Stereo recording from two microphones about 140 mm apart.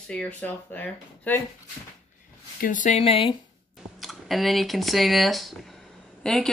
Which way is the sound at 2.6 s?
70° left (ahead or behind).